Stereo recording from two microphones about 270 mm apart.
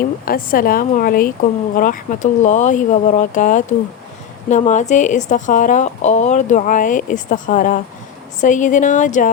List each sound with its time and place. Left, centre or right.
0.3 s a woman's voice: left